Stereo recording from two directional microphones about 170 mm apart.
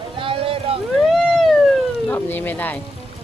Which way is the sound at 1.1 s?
5° left (ahead or behind).